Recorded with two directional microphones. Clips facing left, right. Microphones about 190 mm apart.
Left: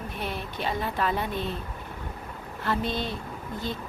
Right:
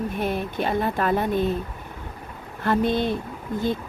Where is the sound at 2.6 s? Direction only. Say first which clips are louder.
Right 7 dB; 55° right (ahead or behind).